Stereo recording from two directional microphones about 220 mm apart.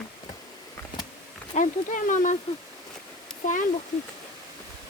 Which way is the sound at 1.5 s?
35° left (ahead or behind).